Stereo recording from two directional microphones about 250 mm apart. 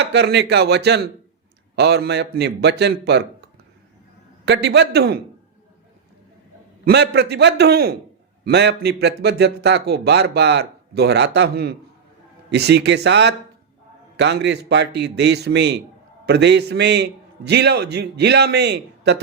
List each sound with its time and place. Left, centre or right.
0.0 s a man's voice: right
4.4 s a man's voice: right
6.8 s a man's voice: right